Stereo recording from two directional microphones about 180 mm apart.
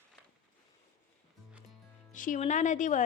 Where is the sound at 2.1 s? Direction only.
45° left (ahead or behind).